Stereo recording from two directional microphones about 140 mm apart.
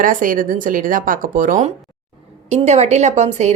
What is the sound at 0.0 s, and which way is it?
Speech, 75° right (ahead or behind).